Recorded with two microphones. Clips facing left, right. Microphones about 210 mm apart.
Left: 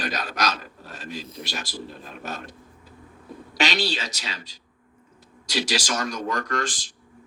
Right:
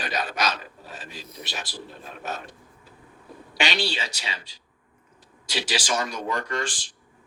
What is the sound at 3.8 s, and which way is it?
Speech, 10° right (ahead or behind).